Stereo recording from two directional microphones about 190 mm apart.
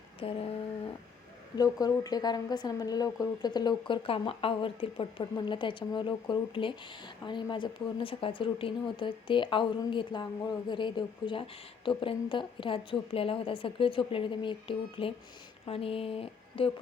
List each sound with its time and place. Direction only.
0.2 s speech: 30° left (ahead or behind)
1.5 s speech: 20° left (ahead or behind)